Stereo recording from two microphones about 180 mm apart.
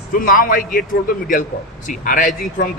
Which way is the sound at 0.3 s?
50° left (ahead or behind).